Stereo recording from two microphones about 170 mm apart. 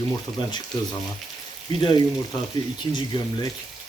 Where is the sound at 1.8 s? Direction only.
30° left (ahead or behind).